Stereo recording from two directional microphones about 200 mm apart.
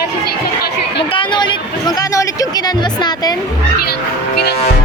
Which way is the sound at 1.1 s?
25° left (ahead or behind).